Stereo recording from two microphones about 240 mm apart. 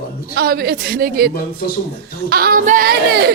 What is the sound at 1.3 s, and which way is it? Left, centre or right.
Speech, left.